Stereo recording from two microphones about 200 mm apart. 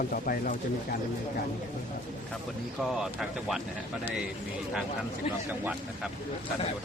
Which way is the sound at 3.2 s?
Centre (ahead or behind).